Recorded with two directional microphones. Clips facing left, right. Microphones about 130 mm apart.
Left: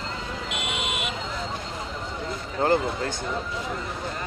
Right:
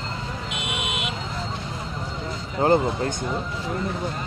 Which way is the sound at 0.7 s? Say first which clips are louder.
Right 2 dB; centre (ahead or behind).